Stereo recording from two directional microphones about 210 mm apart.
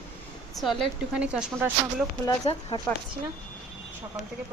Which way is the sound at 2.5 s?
25° left (ahead or behind).